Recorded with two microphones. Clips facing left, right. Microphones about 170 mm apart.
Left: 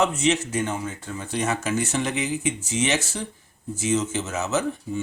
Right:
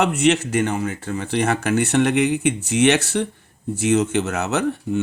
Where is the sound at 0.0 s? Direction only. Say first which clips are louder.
Right 4 dB; 65° right (ahead or behind).